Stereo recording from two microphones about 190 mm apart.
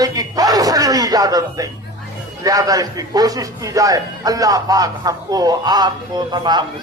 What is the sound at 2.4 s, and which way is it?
A man's voice, 20° right (ahead or behind).